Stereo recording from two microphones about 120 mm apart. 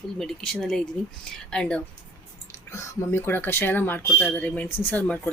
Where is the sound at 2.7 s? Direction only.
25° left (ahead or behind).